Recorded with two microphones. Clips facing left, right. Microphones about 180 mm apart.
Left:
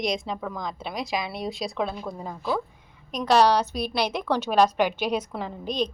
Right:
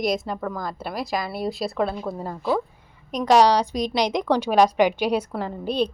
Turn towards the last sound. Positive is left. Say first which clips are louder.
# right 4 dB
turn(degrees=-10)  # may be behind; listen again after turning